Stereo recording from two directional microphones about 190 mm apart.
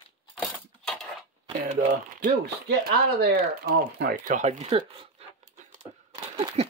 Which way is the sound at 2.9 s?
55° right (ahead or behind).